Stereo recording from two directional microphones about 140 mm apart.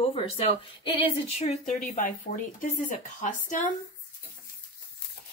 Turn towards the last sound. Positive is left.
turn(degrees=65)  # may be behind; listen again after turning